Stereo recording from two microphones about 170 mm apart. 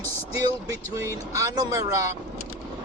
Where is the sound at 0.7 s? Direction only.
20° right (ahead or behind).